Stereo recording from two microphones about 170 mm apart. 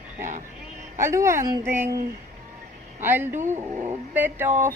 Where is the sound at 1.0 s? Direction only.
15° right (ahead or behind).